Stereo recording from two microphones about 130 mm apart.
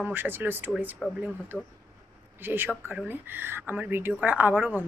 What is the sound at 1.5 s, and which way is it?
Speech, 10° left (ahead or behind).